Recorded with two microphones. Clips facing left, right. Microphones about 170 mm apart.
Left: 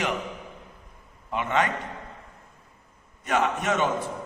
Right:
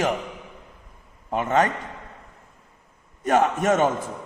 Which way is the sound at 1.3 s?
40° right (ahead or behind).